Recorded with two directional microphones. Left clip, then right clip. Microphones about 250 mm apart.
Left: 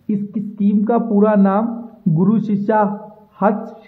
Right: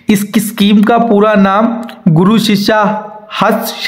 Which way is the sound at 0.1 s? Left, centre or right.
Right.